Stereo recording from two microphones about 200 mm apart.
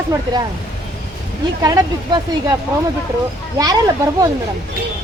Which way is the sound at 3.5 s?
20° right (ahead or behind).